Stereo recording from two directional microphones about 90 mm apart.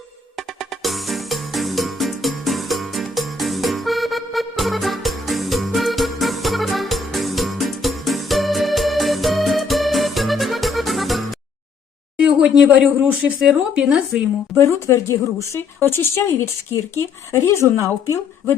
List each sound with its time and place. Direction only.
0.6 s music: centre (ahead or behind)
12.2 s speech: 10° right (ahead or behind)
14.6 s speech: 30° left (ahead or behind)